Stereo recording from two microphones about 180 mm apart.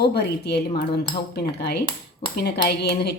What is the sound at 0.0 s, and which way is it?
Speech, 65° left (ahead or behind).